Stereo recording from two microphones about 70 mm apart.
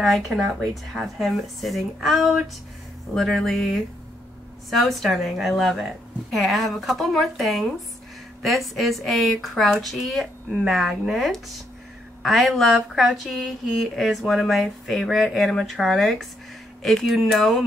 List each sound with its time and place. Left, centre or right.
0.0 s speech: centre